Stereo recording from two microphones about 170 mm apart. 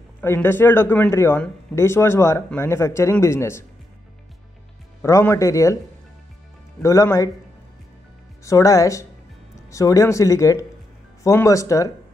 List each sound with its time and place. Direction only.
0.2 s speech: 15° left (ahead or behind)
5.0 s speech: 15° left (ahead or behind)
6.8 s speech: 20° left (ahead or behind)
8.5 s speech: 20° left (ahead or behind)